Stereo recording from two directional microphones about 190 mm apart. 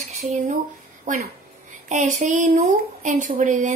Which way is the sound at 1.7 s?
40° right (ahead or behind).